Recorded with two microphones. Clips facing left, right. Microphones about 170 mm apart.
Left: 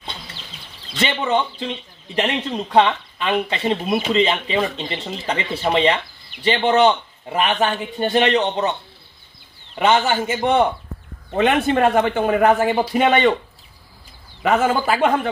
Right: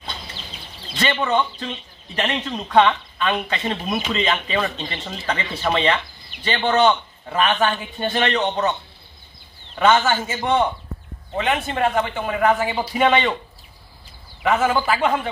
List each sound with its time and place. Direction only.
1.0 s speech: 20° left (ahead or behind)
7.2 s speech: 15° left (ahead or behind)
9.8 s speech: 20° left (ahead or behind)
11.3 s a man's voice: 60° left (ahead or behind)
14.4 s speech: 45° left (ahead or behind)